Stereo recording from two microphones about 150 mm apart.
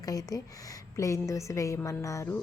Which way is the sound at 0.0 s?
25° left (ahead or behind).